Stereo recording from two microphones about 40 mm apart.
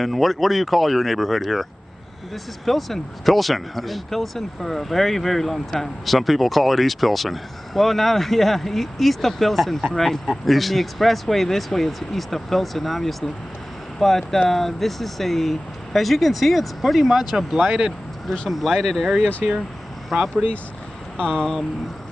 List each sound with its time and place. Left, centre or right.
0.0 s speech: centre
18.5 s speech: centre
20.1 s speech: centre
21.2 s speech: centre